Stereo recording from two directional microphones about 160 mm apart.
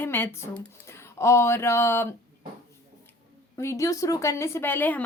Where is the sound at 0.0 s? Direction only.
15° left (ahead or behind).